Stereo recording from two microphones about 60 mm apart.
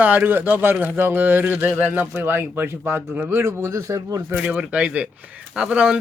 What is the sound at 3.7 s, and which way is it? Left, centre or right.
Speech, right.